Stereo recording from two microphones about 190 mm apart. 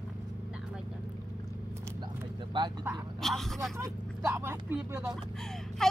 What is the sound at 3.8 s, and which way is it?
Speech, 15° right (ahead or behind).